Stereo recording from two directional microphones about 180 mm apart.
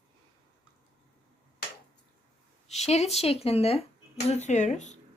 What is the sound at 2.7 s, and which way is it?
A woman's voice, 35° left (ahead or behind).